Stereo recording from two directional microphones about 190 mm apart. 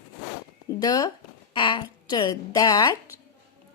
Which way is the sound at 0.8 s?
20° left (ahead or behind).